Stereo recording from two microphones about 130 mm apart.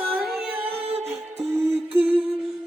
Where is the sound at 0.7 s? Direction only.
50° right (ahead or behind).